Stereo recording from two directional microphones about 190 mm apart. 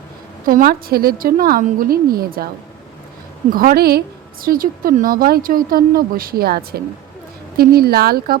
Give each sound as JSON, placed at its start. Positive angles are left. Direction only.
{"t": 0.4, "sound": "speech", "side_deg": -50}
{"t": 3.5, "sound": "speech", "side_deg": -50}